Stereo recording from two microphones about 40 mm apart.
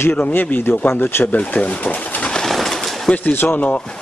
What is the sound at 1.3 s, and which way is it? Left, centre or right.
Speech, left.